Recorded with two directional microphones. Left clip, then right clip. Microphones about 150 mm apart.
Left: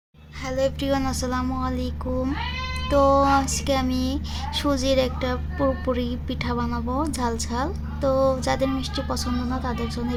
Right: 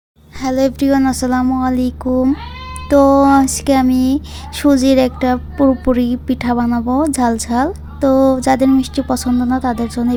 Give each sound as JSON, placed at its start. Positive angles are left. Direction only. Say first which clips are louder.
{"t": 0.4, "sound": "a woman's voice", "louder": "right 9 dB", "side_deg": -55}
{"t": 0.9, "sound": "speech", "louder": "right 10 dB", "side_deg": -35}
{"t": 2.9, "sound": "speech", "louder": "right 8 dB", "side_deg": -40}